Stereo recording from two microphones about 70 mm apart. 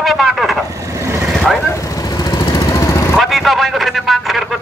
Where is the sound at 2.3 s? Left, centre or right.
Left.